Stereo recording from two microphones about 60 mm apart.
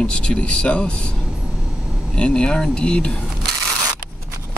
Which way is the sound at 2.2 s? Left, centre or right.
Centre.